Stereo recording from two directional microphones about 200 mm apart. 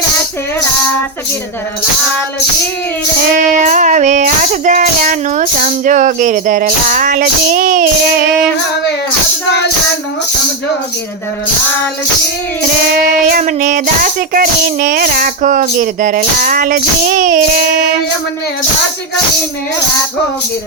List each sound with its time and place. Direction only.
3.5 s speech: 40° right (ahead or behind)
13.2 s speech: 45° right (ahead or behind)